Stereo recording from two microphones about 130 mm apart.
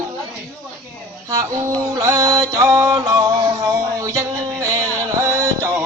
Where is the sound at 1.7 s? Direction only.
25° right (ahead or behind).